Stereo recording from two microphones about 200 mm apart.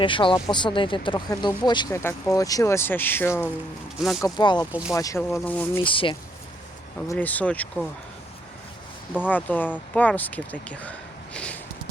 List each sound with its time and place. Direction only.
0.0 s speech: 25° left (ahead or behind)
4.2 s speech: 20° left (ahead or behind)
4.7 s speech: 5° right (ahead or behind)
4.9 s speech: 15° left (ahead or behind)
5.8 s speech: 25° left (ahead or behind)
7.1 s speech: 10° left (ahead or behind)
9.3 s speech: 10° left (ahead or behind)
11.3 s a sound: 5° left (ahead or behind)